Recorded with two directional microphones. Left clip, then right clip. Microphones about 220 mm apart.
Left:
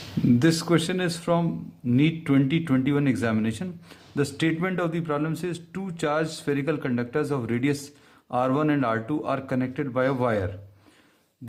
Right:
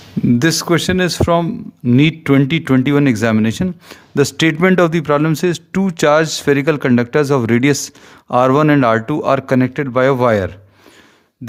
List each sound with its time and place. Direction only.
0.3 s speech: 45° right (ahead or behind)